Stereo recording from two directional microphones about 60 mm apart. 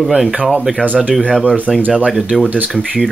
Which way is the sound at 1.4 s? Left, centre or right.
Left.